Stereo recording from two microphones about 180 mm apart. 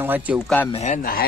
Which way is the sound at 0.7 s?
40° left (ahead or behind).